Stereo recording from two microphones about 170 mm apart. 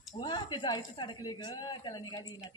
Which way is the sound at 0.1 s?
30° left (ahead or behind).